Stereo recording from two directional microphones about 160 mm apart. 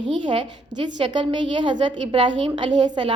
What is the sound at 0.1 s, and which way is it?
A woman's voice, 30° right (ahead or behind).